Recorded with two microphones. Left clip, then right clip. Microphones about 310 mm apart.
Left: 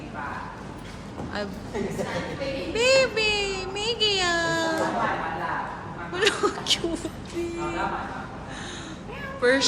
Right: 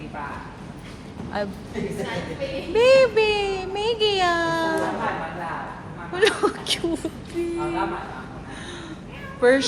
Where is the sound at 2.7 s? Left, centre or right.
Centre.